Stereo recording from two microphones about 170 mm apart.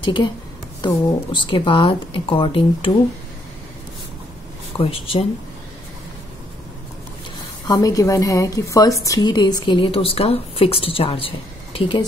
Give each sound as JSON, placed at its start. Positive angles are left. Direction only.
{"t": 0.0, "sound": "a woman's voice", "side_deg": 25}
{"t": 4.7, "sound": "a woman's voice", "side_deg": 30}
{"t": 7.6, "sound": "a woman's voice", "side_deg": 20}